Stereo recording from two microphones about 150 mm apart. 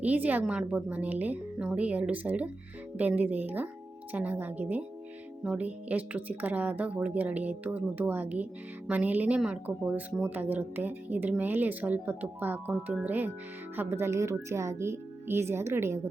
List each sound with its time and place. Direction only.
0.0 s speech: 10° right (ahead or behind)